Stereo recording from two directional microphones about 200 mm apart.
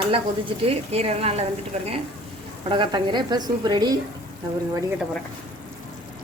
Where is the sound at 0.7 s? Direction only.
30° right (ahead or behind).